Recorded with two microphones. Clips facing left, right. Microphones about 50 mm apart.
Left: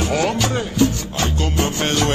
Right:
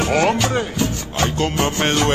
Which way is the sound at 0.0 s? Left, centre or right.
Right.